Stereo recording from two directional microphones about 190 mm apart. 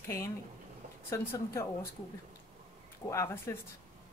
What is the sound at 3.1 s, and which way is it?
Speech, 15° left (ahead or behind).